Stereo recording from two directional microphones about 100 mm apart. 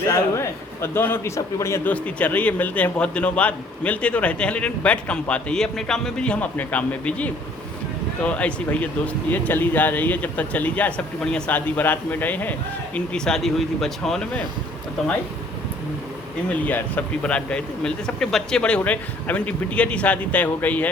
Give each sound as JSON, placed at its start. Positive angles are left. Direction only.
{"t": 0.1, "sound": "a man's voice", "side_deg": 30}
{"t": 1.9, "sound": "speech", "side_deg": 15}
{"t": 13.1, "sound": "speech", "side_deg": 5}
{"t": 16.6, "sound": "speech", "side_deg": 15}